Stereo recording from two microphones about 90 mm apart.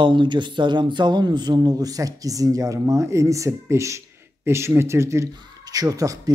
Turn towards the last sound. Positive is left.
turn(degrees=-40)  # may be behind; listen again after turning